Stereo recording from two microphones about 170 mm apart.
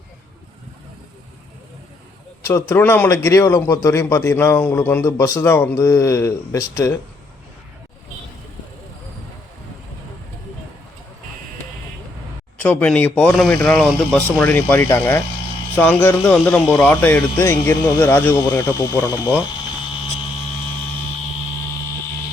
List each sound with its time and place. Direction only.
2.4 s a man's voice: 20° left (ahead or behind)
12.6 s a man's voice: 10° left (ahead or behind)
16.3 s a man's voice: centre (ahead or behind); by 19.3 s 20° left (ahead or behind)